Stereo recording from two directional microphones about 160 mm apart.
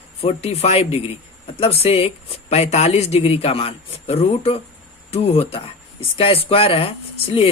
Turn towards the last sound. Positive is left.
turn(degrees=35)  # may be behind; listen again after turning